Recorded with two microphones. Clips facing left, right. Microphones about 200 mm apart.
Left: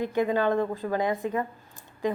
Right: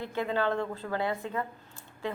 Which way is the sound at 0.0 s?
15° left (ahead or behind).